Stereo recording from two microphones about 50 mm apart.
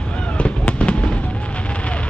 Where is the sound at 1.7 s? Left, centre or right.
Left.